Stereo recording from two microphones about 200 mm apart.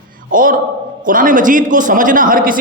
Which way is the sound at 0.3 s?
45° right (ahead or behind).